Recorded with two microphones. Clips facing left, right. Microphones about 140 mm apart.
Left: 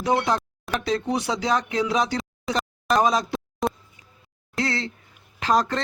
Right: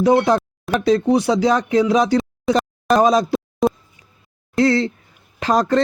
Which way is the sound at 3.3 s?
Centre (ahead or behind).